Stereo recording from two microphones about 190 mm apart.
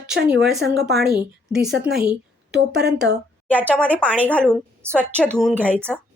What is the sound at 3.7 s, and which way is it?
Speech, 5° left (ahead or behind).